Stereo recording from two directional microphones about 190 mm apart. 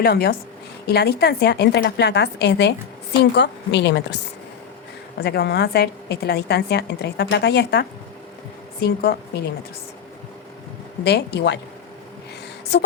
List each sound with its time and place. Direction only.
0.0 s a woman's voice: 55° left (ahead or behind)
5.2 s a woman's voice: 60° left (ahead or behind)
11.0 s a woman's voice: 60° left (ahead or behind)
12.7 s a woman's voice: 60° left (ahead or behind)